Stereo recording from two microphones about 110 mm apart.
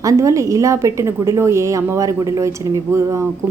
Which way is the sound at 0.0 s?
30° right (ahead or behind).